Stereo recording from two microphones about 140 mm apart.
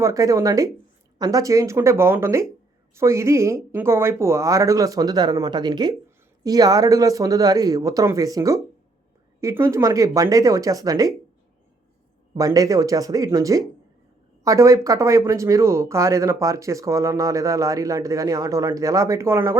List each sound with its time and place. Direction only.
0.0 s speech: 25° right (ahead or behind)
12.4 s speech: 25° right (ahead or behind)